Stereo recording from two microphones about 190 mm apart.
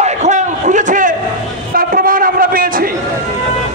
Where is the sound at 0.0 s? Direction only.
40° right (ahead or behind).